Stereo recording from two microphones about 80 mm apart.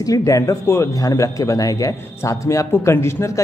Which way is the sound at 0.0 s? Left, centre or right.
Left.